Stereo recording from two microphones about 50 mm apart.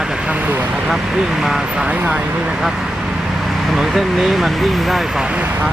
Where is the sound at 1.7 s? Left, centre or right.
Centre.